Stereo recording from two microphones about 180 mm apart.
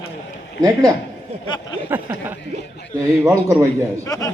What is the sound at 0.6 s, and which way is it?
A man's voice, 20° right (ahead or behind).